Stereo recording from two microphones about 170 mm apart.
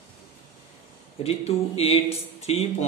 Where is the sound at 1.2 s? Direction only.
35° left (ahead or behind).